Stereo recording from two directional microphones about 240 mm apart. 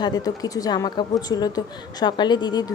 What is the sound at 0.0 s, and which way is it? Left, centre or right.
A woman's voice, centre.